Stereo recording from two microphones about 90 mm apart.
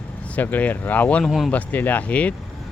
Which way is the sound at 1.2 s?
5° left (ahead or behind).